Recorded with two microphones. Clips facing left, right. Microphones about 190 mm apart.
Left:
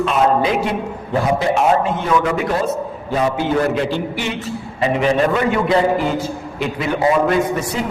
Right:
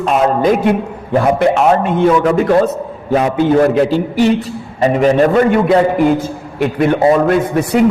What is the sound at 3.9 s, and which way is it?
A man's voice, 40° right (ahead or behind).